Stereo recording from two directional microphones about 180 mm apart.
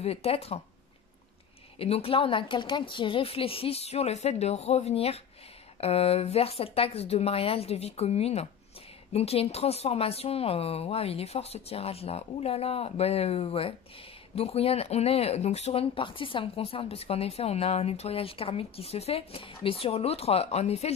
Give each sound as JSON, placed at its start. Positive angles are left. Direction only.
{"t": 0.0, "sound": "speech", "side_deg": 35}
{"t": 1.8, "sound": "speech", "side_deg": 35}